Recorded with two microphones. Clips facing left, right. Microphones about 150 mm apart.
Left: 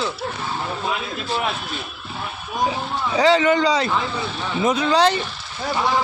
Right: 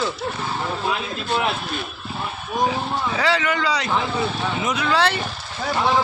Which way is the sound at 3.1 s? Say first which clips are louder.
Left 8 dB; 20° left (ahead or behind).